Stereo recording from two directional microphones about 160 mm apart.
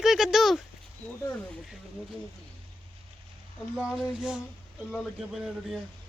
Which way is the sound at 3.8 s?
5° right (ahead or behind).